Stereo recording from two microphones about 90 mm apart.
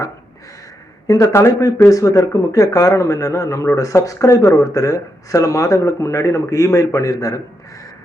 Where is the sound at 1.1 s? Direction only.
35° left (ahead or behind).